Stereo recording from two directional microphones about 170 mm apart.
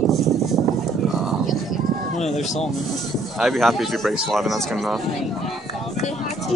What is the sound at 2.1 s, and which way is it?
Speech, 45° left (ahead or behind).